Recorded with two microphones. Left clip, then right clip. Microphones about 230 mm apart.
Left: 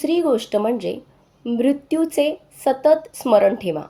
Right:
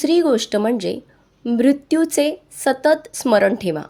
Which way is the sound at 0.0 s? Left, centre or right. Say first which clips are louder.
Right 3 dB; right.